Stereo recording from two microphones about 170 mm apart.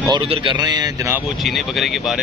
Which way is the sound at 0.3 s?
30° right (ahead or behind).